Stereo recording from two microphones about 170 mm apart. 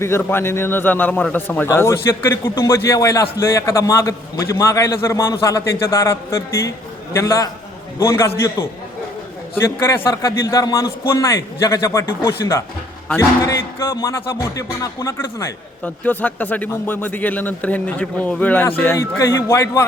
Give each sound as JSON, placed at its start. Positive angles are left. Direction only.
{"t": 0.0, "sound": "a man's voice", "side_deg": 15}
{"t": 9.6, "sound": "a man's voice", "side_deg": 15}